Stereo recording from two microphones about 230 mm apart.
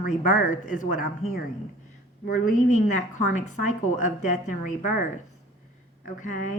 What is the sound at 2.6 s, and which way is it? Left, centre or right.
A woman's voice, left.